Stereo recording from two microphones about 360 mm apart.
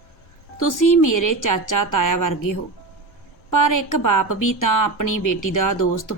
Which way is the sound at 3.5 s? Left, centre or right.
Left.